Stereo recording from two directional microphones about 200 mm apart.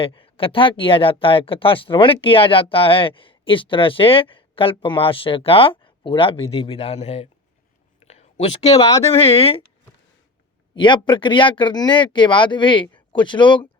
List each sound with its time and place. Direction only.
0.0 s speech: 25° left (ahead or behind)
8.0 s a sound: 35° left (ahead or behind)
8.8 s speech: 15° left (ahead or behind)
9.1 s speech: 30° left (ahead or behind)
10.8 s speech: 25° left (ahead or behind)